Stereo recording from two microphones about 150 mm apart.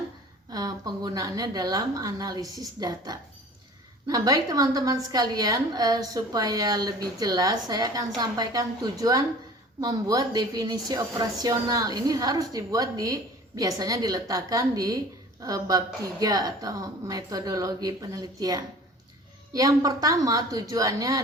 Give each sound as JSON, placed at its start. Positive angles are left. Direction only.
{"t": 0.5, "sound": "a woman's voice", "side_deg": -25}